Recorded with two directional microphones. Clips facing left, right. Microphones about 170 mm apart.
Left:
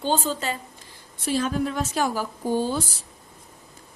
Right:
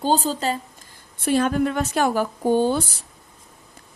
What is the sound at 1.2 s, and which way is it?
A woman's voice, 60° right (ahead or behind).